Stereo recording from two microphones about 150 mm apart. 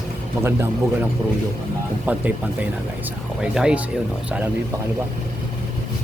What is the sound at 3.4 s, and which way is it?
Speech, 5° right (ahead or behind).